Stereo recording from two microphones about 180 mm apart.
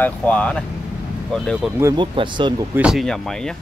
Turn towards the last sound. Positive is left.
turn(degrees=5)  # may be behind; listen again after turning